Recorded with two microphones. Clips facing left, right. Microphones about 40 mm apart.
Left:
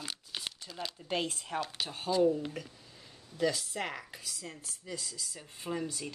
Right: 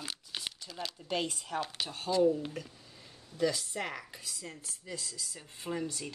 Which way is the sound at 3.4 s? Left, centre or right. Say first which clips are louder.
Even; left.